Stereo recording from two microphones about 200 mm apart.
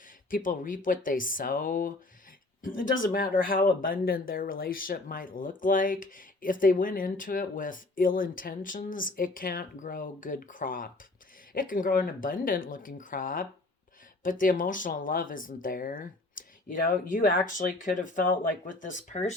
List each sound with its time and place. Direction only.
0.3 s speech: 40° left (ahead or behind)